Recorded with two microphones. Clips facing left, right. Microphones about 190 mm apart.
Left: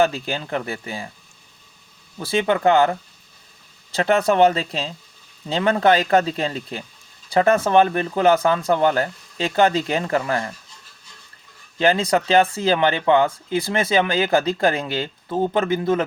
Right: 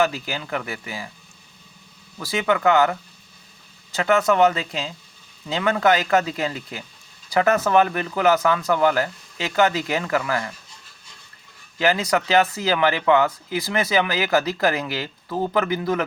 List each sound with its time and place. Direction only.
0.0 s speech: 30° left (ahead or behind)
2.1 s speech: 30° left (ahead or behind)
11.8 s speech: 30° left (ahead or behind)